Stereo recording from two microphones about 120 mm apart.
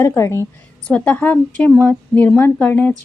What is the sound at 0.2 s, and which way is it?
Speech, 20° left (ahead or behind).